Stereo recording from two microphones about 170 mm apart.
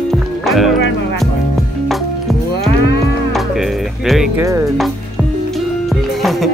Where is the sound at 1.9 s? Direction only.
Centre (ahead or behind).